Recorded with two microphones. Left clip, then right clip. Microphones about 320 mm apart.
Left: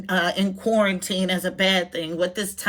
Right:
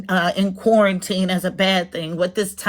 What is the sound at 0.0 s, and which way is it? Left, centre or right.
Speech, centre.